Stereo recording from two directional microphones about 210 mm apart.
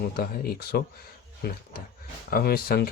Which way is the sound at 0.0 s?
45° left (ahead or behind).